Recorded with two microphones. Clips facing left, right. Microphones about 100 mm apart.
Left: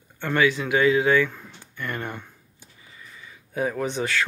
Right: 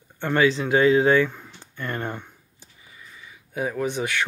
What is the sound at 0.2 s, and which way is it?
Speech, 25° right (ahead or behind).